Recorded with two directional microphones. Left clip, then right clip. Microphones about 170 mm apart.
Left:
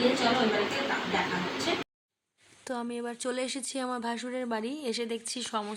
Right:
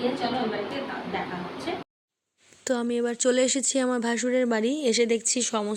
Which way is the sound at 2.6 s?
25° right (ahead or behind).